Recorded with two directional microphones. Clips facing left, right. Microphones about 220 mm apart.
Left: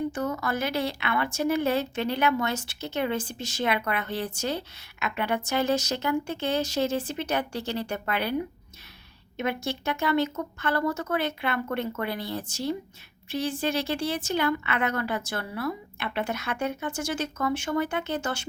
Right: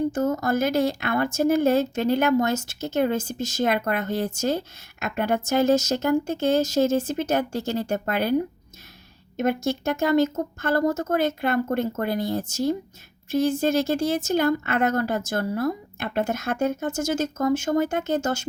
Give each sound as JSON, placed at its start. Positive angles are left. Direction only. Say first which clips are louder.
{"t": 0.1, "sound": "a woman's voice", "louder": "right 6 dB", "side_deg": -45}